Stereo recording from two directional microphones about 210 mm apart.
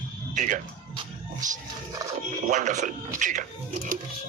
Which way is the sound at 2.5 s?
35° right (ahead or behind).